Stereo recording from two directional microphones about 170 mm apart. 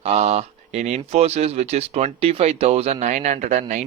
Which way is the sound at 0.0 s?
40° right (ahead or behind).